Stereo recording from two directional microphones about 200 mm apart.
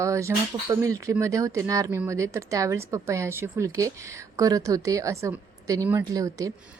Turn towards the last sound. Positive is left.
turn(degrees=-15)  # may be behind; listen again after turning